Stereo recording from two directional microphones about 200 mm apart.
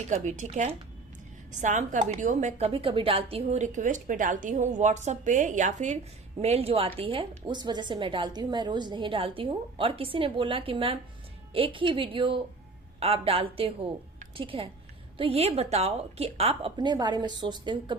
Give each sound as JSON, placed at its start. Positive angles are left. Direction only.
{"t": 0.1, "sound": "a woman's voice", "side_deg": -35}
{"t": 14.2, "sound": "a sound", "side_deg": -25}
{"t": 15.2, "sound": "a woman's voice", "side_deg": -30}